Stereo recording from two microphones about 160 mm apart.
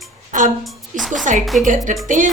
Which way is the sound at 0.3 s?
55° right (ahead or behind).